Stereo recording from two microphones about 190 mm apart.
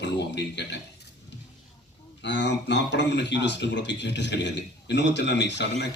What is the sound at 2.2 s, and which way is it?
Speech, 65° left (ahead or behind).